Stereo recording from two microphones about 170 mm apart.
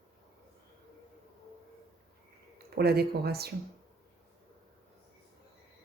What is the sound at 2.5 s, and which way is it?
Speech, 65° right (ahead or behind).